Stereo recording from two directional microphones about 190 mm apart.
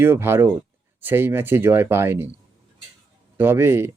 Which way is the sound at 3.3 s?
10° right (ahead or behind).